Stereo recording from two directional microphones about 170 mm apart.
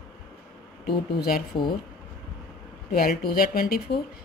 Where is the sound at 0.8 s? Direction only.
60° left (ahead or behind).